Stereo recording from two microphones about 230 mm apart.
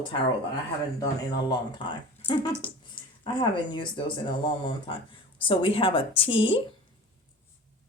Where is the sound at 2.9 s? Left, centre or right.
Left.